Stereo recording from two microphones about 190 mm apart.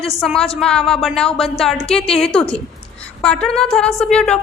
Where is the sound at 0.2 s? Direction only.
Centre (ahead or behind).